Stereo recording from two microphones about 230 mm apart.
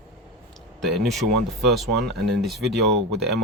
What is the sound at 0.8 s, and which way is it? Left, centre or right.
Speech, centre.